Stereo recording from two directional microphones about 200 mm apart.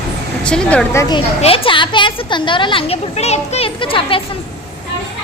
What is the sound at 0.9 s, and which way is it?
Speech, 20° left (ahead or behind).